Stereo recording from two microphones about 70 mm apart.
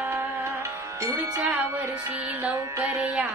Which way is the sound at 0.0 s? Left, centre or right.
Right.